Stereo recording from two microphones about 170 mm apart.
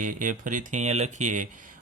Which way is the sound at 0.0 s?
50° right (ahead or behind).